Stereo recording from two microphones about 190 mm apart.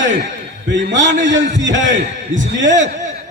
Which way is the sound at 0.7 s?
70° right (ahead or behind).